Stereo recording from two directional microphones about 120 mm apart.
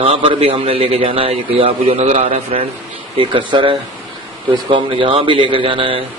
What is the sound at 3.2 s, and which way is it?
Speech, 45° right (ahead or behind).